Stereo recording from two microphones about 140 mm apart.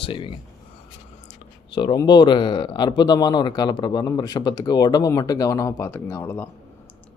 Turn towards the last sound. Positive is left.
turn(degrees=20)  # may be behind; listen again after turning